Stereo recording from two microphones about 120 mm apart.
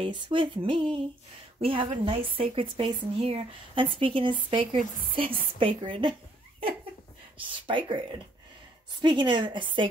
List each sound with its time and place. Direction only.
0.0 s a woman's voice: 45° right (ahead or behind)
7.3 s a woman's voice: 45° right (ahead or behind)
9.0 s a woman's voice: 40° right (ahead or behind)